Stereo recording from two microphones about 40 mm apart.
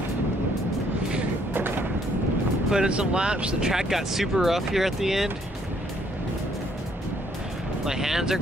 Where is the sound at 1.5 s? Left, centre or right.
Right.